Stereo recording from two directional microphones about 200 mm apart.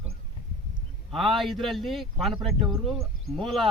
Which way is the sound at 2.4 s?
25° right (ahead or behind).